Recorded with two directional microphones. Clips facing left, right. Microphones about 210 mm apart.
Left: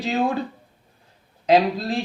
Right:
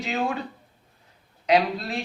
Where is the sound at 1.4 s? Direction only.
30° left (ahead or behind).